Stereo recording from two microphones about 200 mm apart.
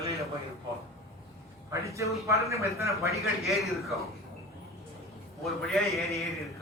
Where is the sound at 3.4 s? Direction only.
Centre (ahead or behind).